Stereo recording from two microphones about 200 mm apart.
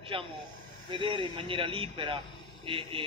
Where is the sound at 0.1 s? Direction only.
25° right (ahead or behind).